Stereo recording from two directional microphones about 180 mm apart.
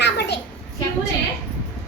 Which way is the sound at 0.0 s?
70° left (ahead or behind).